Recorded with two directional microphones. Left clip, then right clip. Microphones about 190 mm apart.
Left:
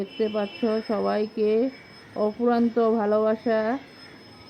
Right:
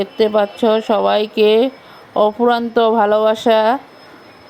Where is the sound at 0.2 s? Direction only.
40° right (ahead or behind).